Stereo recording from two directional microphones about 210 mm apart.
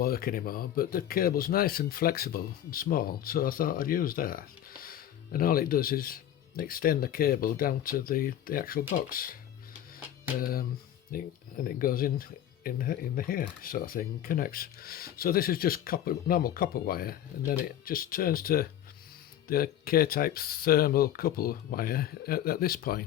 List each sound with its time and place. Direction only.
0.0 s speech: 45° left (ahead or behind)
10.4 s speech: 45° left (ahead or behind)